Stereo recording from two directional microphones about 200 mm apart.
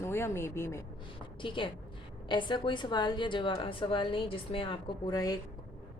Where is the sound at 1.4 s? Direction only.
25° left (ahead or behind).